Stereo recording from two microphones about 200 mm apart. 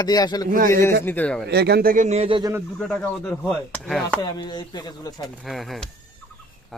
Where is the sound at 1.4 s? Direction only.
55° right (ahead or behind); by 2.4 s 30° right (ahead or behind).